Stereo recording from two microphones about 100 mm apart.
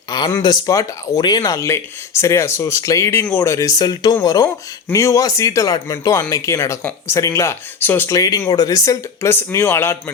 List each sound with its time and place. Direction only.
0.1 s speech: 45° left (ahead or behind)
7.8 s speech: 20° left (ahead or behind)
8.1 s speech: 35° left (ahead or behind)